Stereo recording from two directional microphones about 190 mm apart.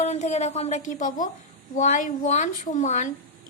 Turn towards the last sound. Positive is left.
turn(degrees=40)  # may be behind; listen again after turning